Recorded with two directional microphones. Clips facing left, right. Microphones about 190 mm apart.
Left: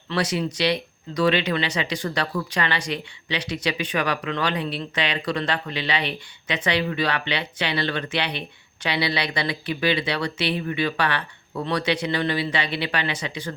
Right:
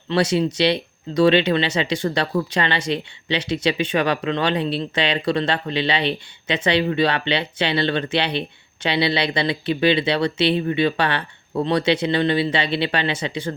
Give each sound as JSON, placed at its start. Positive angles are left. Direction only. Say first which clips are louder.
{"t": 0.1, "sound": "speech", "louder": "right 6 dB", "side_deg": -25}